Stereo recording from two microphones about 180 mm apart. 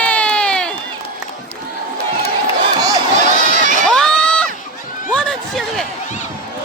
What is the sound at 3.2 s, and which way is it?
Run, 45° right (ahead or behind).